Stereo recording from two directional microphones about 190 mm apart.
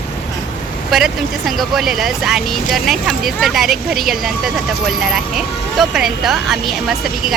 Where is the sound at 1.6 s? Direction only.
Centre (ahead or behind).